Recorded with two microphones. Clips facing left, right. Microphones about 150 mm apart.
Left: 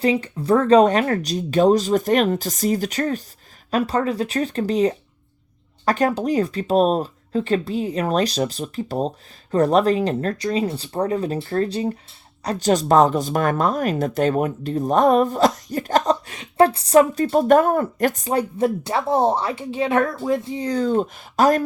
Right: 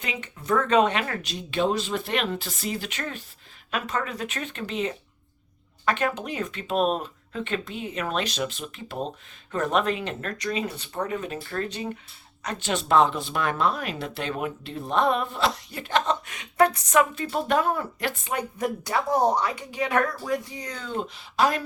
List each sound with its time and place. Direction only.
0.0 s speech: 35° left (ahead or behind)